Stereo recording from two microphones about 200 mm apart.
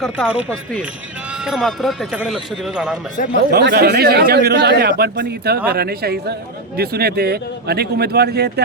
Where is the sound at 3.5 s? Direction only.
55° right (ahead or behind).